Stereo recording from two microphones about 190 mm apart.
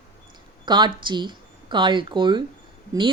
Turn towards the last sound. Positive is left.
turn(degrees=-15)  # may be behind; listen again after turning